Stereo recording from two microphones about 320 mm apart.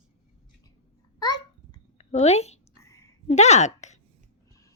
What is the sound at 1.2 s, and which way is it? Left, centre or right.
Babbling, centre.